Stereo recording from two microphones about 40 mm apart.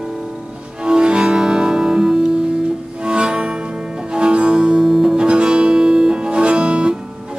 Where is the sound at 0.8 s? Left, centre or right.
Right.